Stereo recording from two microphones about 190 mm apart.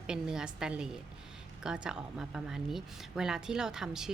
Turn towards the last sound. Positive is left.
turn(degrees=-5)  # may be behind; listen again after turning